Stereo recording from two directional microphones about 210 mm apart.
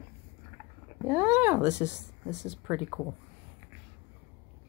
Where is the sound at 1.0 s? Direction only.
10° right (ahead or behind).